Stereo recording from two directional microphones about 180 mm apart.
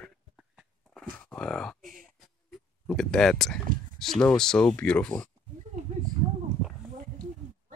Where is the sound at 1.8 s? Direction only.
50° right (ahead or behind).